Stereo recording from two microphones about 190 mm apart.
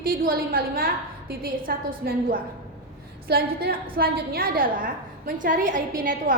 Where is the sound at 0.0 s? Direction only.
50° right (ahead or behind).